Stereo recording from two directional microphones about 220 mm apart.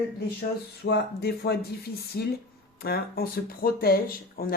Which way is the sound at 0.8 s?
45° left (ahead or behind).